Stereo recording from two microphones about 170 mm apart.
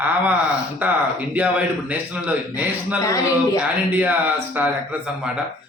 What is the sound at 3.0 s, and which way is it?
Speech, 20° left (ahead or behind).